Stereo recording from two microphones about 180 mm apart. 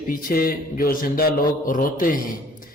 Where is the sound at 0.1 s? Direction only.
55° left (ahead or behind).